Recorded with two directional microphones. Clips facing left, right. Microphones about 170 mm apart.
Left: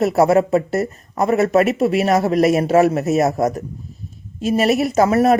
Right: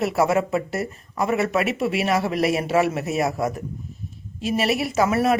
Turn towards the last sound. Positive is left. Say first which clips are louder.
# left 6 dB
turn(degrees=40)  # may be behind; listen again after turning